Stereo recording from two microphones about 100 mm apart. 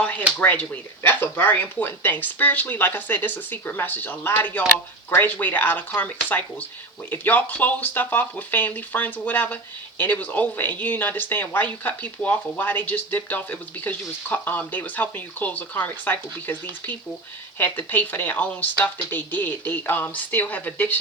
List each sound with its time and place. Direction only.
0.0 s a sound: 15° left (ahead or behind)
0.3 s speech: 15° left (ahead or behind)
17.6 s speech: 20° left (ahead or behind)